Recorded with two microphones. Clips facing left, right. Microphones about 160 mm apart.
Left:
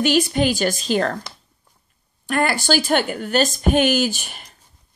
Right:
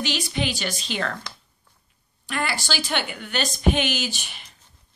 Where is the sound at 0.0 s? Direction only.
50° left (ahead or behind).